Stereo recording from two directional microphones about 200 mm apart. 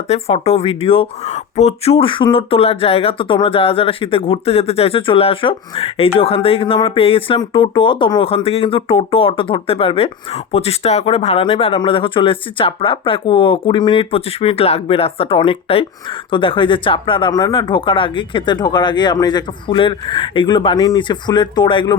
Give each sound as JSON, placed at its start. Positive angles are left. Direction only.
{"t": 0.1, "sound": "speech", "side_deg": 30}